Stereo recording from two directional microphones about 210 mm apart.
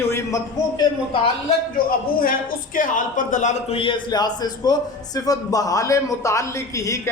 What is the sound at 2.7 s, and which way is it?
A man's voice, 40° left (ahead or behind).